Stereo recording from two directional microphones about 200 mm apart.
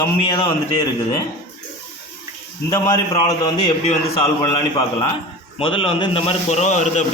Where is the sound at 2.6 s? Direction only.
20° left (ahead or behind).